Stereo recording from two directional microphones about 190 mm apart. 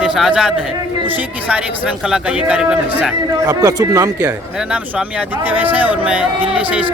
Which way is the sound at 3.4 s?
20° right (ahead or behind).